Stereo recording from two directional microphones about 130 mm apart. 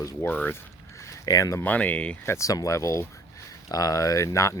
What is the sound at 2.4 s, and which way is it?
Speech, 25° left (ahead or behind).